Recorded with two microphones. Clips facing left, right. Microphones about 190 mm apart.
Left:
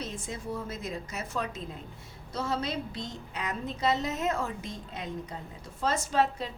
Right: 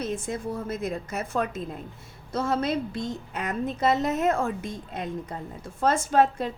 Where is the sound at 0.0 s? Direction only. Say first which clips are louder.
Right 7 dB; 55° right (ahead or behind).